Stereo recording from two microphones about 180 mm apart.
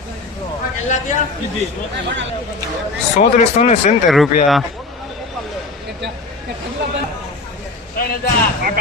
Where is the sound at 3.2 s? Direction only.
40° left (ahead or behind).